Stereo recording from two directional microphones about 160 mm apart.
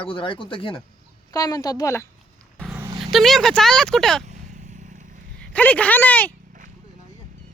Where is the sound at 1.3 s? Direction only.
25° left (ahead or behind).